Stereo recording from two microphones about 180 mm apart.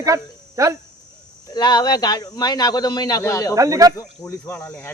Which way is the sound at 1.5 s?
25° left (ahead or behind).